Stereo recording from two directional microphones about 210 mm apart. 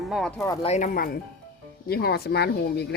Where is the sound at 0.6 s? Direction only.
35° left (ahead or behind).